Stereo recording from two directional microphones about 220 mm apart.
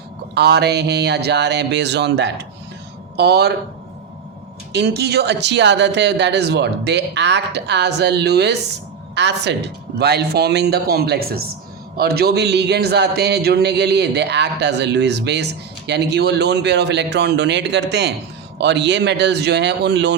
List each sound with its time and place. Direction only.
0.3 s a man's voice: 50° right (ahead or behind)
4.7 s a man's voice: 50° right (ahead or behind)